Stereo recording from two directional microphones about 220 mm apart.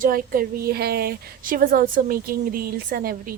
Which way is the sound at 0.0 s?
40° right (ahead or behind).